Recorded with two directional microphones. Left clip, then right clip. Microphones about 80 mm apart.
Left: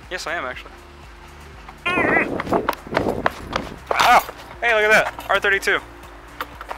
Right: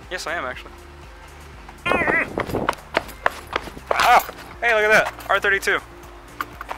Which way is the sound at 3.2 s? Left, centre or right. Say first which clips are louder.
Even; centre.